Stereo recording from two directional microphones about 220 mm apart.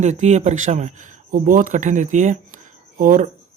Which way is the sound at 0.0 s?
30° right (ahead or behind).